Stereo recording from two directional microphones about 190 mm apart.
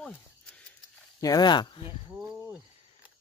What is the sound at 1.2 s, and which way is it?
Speech, 20° left (ahead or behind).